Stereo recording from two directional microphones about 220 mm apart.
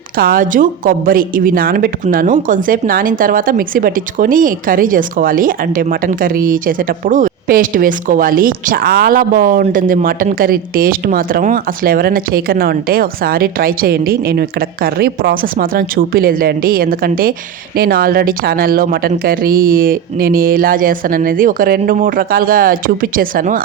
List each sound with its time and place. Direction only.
0.2 s a woman's voice: 40° right (ahead or behind)